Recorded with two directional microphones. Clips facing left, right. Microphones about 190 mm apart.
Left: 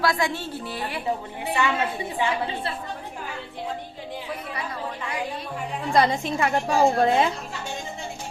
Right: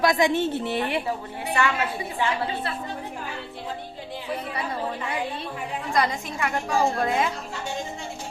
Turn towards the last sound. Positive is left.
turn(degrees=30)  # may be behind; listen again after turning